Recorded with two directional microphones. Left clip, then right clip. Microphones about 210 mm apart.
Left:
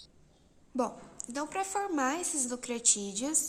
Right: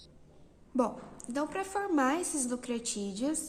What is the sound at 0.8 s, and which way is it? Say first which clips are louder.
A woman's voice: right 2 dB; 15° left (ahead or behind).